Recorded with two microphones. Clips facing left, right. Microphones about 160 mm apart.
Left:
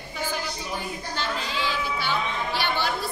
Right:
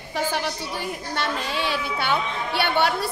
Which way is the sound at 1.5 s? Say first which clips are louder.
Right 2 dB; 65° right (ahead or behind).